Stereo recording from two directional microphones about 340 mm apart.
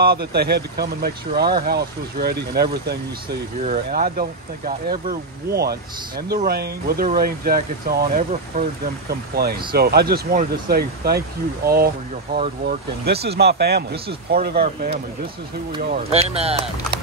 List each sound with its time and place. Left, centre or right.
0.0 s speech: right
9.3 s speech: right
16.0 s speech: centre